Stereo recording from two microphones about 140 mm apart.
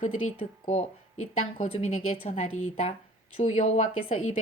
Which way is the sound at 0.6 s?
50° left (ahead or behind).